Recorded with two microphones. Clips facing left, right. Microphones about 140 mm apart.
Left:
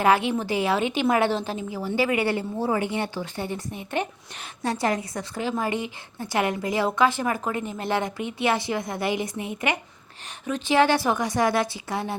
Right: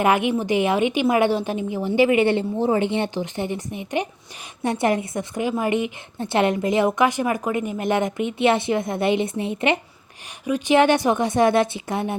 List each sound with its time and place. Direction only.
0.0 s a woman's voice: 20° right (ahead or behind)
10.4 s a woman's voice: 15° right (ahead or behind)